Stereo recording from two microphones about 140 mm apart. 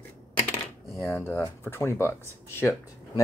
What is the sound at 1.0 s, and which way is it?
Speech, 20° left (ahead or behind).